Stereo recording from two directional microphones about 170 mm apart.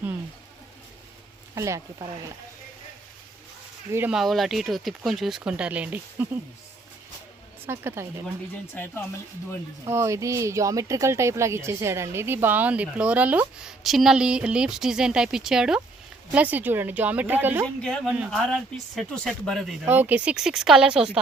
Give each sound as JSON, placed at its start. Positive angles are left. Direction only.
{"t": 1.5, "sound": "speech", "side_deg": -20}
{"t": 3.9, "sound": "speech", "side_deg": -10}
{"t": 4.2, "sound": "speech", "side_deg": 0}
{"t": 7.7, "sound": "speech", "side_deg": -15}
{"t": 8.7, "sound": "speech", "side_deg": 15}
{"t": 9.8, "sound": "speech", "side_deg": -15}
{"t": 17.8, "sound": "speech", "side_deg": 5}
{"t": 19.8, "sound": "speech", "side_deg": -10}